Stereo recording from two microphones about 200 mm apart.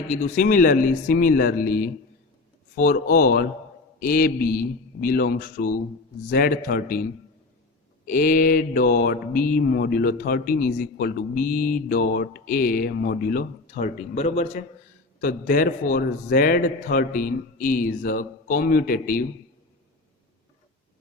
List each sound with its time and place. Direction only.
0.1 s mantra: 40° left (ahead or behind)
15.2 s mantra: 45° left (ahead or behind)